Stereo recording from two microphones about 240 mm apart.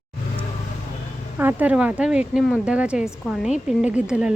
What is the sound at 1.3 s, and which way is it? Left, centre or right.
Speech, centre.